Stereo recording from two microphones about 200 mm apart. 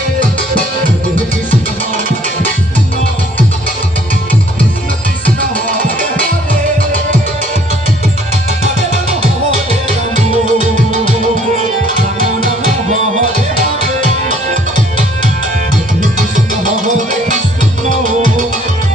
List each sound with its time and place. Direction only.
10.4 s music: 35° right (ahead or behind)
12.9 s music: 35° right (ahead or behind)
17.8 s music: 40° right (ahead or behind)